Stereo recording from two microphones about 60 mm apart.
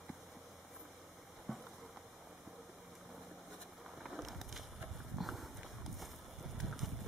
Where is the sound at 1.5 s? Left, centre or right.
Centre.